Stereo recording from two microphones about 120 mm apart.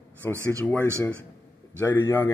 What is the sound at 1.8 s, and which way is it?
Speech, 20° left (ahead or behind).